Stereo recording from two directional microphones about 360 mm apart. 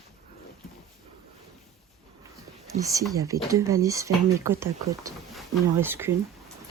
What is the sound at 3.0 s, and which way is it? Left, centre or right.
Speech, centre.